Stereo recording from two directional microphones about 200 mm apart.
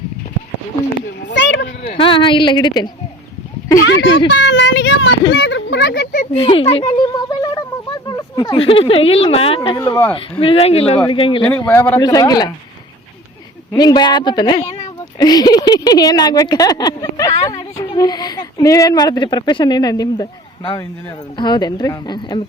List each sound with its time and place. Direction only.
1.3 s a sound: 60° left (ahead or behind)
2.0 s speech: 25° left (ahead or behind)
3.8 s speech: 70° left (ahead or behind); by 6.2 s 50° left (ahead or behind)
6.3 s speech: 25° left (ahead or behind)
10.4 s speech: 30° left (ahead or behind)
11.6 s speech: 15° left (ahead or behind)
13.7 s speech: 20° left (ahead or behind)
21.3 s speech: 20° left (ahead or behind)